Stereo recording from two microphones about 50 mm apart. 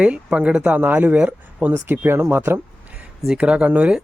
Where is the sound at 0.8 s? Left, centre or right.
Right.